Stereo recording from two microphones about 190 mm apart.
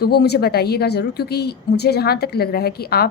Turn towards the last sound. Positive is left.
turn(degrees=55)  # may be behind; listen again after turning